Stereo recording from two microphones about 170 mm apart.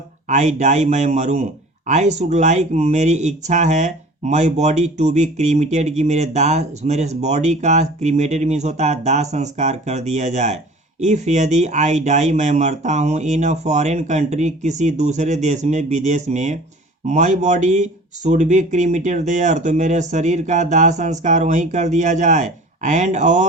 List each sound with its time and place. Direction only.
0.3 s speech: 45° right (ahead or behind)